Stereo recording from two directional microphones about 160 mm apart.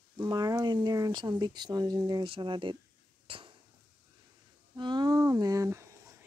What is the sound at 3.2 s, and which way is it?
Dishes, 35° right (ahead or behind).